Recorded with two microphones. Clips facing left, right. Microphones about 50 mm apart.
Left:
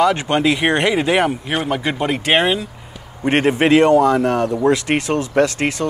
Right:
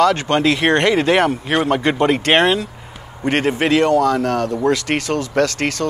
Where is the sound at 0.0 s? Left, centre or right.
Centre.